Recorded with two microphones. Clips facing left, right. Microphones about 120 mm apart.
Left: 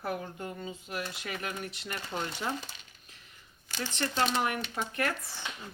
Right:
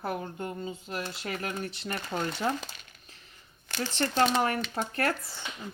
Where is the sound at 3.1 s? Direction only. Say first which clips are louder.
Right 2 dB; 30° right (ahead or behind).